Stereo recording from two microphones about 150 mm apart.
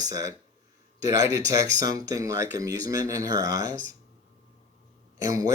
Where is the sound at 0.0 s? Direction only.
20° right (ahead or behind).